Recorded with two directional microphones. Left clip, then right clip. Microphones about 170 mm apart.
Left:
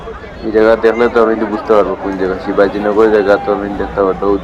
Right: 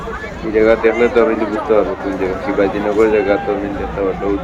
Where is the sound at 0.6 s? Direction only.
15° left (ahead or behind).